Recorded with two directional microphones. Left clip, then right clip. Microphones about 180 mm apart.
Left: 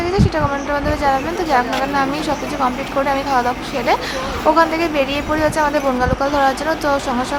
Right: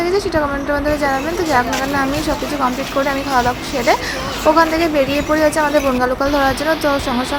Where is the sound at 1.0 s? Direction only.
10° right (ahead or behind).